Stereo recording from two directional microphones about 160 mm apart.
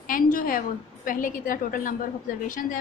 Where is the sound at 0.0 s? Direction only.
60° left (ahead or behind).